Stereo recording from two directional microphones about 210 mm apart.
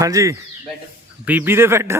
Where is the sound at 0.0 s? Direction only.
15° right (ahead or behind).